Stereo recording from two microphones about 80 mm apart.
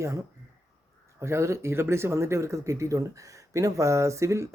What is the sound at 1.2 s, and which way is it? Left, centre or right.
Speech, right.